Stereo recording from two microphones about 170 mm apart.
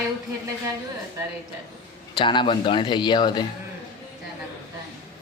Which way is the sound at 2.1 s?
30° left (ahead or behind).